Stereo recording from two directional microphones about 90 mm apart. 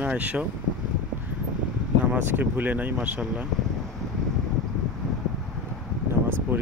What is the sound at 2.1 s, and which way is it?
Speech, 20° right (ahead or behind).